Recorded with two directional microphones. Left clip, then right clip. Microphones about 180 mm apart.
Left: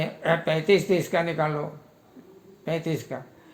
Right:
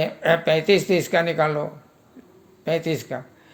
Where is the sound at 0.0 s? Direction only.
25° right (ahead or behind).